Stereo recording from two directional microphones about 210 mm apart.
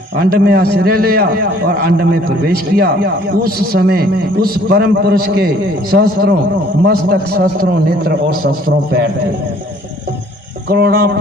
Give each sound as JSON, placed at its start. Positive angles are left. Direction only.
{"t": 0.2, "sound": "a man's voice", "side_deg": -45}
{"t": 10.7, "sound": "a man's voice", "side_deg": -45}